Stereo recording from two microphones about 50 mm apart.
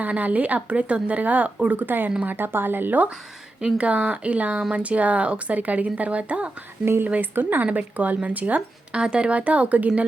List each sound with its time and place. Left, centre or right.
0.0 s speech: right
3.6 s speech: right
6.8 s speech: right
7.2 s speech: right
9.0 s speech: right